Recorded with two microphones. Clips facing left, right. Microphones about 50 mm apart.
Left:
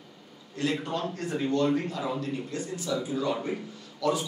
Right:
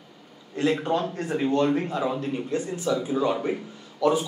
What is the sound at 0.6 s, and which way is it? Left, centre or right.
A man's voice, right.